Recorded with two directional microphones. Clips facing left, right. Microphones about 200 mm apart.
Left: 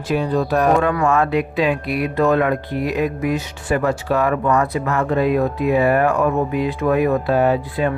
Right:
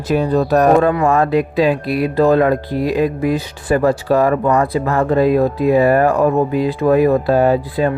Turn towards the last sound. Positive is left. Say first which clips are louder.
# right 3 dB
turn(degrees=-35)  # may be behind; listen again after turning